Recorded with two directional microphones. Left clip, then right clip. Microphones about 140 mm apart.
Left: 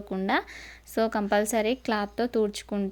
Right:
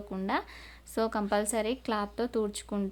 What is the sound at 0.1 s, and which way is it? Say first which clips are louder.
A woman's voice: left 6 dB; 25° left (ahead or behind).